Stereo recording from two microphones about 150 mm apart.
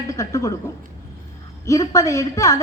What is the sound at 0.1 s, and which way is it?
Speech, 20° left (ahead or behind).